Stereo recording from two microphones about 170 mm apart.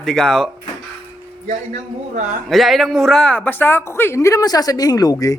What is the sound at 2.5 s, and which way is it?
Speech, centre (ahead or behind).